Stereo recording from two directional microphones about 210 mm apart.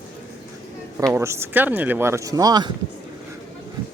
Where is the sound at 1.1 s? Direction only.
10° right (ahead or behind).